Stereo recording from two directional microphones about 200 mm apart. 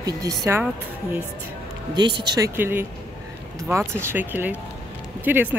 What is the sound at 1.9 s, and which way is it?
Speech, 20° right (ahead or behind).